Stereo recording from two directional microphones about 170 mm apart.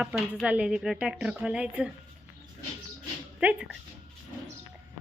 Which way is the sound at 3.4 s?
10° right (ahead or behind).